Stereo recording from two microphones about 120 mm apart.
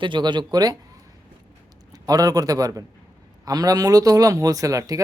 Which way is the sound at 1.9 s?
30° right (ahead or behind).